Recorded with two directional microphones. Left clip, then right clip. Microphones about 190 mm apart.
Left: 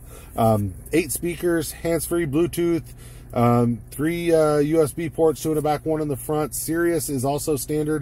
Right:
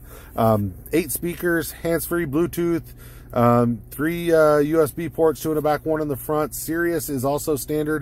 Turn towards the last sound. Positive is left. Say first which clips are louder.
# right 1 dB
turn(degrees=-10)  # may be behind; listen again after turning